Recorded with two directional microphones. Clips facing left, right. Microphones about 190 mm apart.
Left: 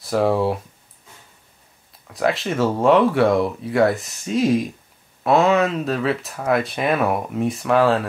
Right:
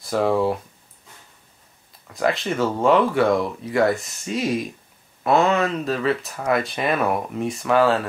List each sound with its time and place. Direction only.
0.0 s speech: centre (ahead or behind)
1.9 s speech: centre (ahead or behind)